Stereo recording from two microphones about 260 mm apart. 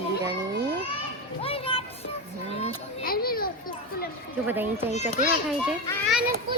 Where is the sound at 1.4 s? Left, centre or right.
Left.